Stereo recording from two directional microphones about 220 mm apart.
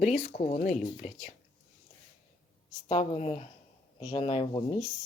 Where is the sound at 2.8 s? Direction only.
30° left (ahead or behind).